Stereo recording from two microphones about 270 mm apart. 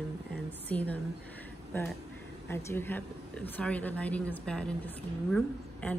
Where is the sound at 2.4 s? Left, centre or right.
Centre.